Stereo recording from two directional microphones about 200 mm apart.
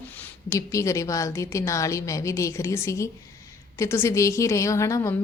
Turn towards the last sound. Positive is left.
turn(degrees=15)  # may be behind; listen again after turning